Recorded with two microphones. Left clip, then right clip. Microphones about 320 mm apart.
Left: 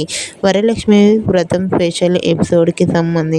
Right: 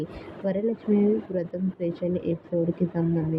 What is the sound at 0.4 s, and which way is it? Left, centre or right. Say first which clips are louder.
Speech: left 14 dB; left.